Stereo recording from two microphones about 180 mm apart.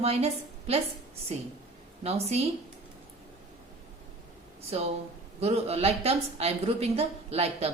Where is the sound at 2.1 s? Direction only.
35° right (ahead or behind).